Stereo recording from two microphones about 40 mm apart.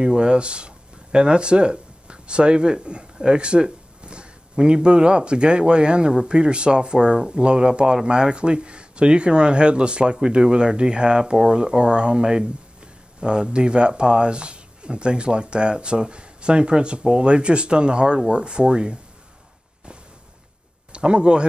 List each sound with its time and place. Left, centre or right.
0.0 s speech: right
20.9 s speech: right